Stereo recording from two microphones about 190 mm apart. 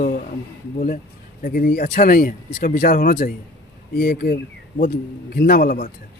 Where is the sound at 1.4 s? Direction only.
50° left (ahead or behind).